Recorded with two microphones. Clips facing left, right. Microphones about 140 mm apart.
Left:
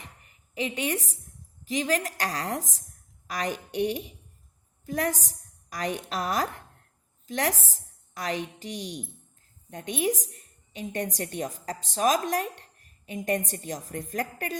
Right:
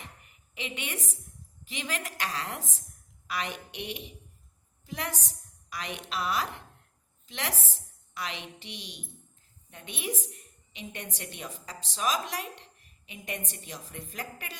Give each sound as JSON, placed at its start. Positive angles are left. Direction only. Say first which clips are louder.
{"t": 0.5, "sound": "a woman's voice", "louder": "left 9 dB", "side_deg": 35}